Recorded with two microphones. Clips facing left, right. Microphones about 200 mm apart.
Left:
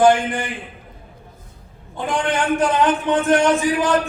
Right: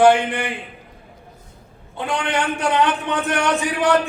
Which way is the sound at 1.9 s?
65° right (ahead or behind).